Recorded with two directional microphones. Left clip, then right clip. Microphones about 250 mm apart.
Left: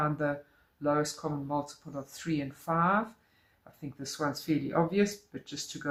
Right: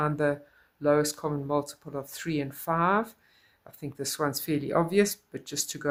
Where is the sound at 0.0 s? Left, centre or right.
Right.